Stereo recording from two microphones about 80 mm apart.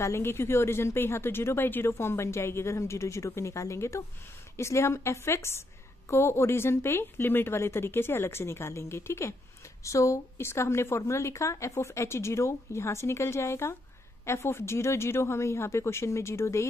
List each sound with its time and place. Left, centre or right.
0.0 s a woman's voice: left